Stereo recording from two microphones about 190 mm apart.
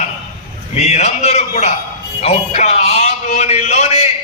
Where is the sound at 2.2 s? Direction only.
35° left (ahead or behind).